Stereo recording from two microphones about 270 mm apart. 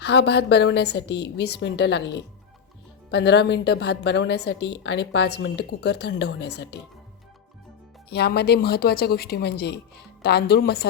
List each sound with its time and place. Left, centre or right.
0.0 s a woman's voice: left
8.1 s a woman's voice: left